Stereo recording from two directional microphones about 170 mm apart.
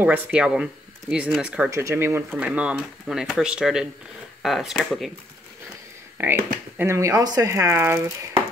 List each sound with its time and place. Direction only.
0.0 s speech: 10° right (ahead or behind)
6.1 s speech: 10° right (ahead or behind)